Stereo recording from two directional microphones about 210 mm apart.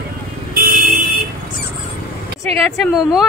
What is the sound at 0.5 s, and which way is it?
Vehicle, 45° right (ahead or behind).